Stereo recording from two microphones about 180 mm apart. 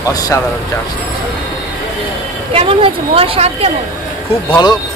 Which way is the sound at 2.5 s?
30° right (ahead or behind).